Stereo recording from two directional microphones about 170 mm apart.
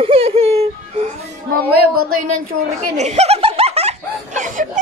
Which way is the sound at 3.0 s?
40° right (ahead or behind).